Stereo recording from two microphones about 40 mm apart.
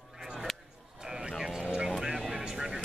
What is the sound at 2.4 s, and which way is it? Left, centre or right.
Vehicle, centre.